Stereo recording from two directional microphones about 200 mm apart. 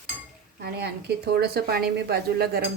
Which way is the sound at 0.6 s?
55° right (ahead or behind).